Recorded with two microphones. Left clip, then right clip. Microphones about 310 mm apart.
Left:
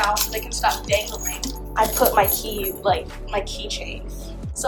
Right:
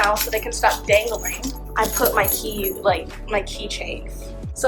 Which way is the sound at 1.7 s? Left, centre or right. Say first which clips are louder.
Left 1 dB; centre.